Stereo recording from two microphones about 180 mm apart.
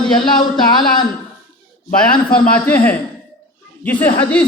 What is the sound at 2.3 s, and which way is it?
Speech, 10° left (ahead or behind).